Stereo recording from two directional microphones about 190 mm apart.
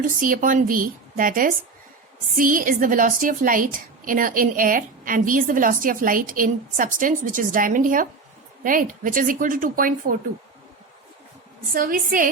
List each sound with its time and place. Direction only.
0.0 s a woman's voice: 45° right (ahead or behind)
11.7 s a woman's voice: 50° right (ahead or behind)